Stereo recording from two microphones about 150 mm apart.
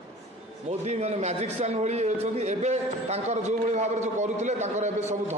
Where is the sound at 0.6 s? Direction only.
50° right (ahead or behind).